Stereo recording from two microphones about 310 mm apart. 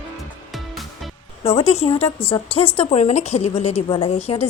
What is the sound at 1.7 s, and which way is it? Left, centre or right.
Speech, centre.